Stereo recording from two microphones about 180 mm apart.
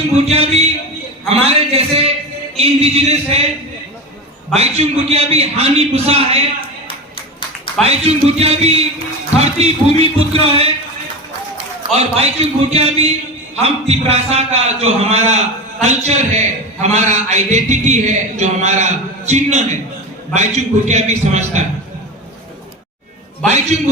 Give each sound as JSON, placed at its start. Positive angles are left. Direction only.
{"t": 0.3, "sound": "a man's voice", "side_deg": -35}
{"t": 4.5, "sound": "a man's voice", "side_deg": -35}
{"t": 6.8, "sound": "music", "side_deg": 30}
{"t": 7.8, "sound": "a man's voice", "side_deg": -35}
{"t": 11.9, "sound": "a man's voice", "side_deg": -35}
{"t": 23.7, "sound": "a man's voice", "side_deg": -40}